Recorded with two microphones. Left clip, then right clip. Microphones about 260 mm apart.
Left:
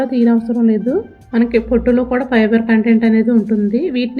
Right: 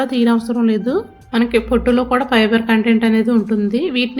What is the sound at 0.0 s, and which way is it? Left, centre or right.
A woman's voice, centre.